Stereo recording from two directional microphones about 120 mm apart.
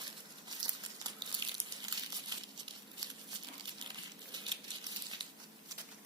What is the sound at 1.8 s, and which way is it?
Crumpling, 35° right (ahead or behind).